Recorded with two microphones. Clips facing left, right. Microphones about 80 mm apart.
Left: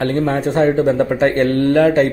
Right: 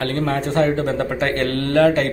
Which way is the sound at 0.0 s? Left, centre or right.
Left.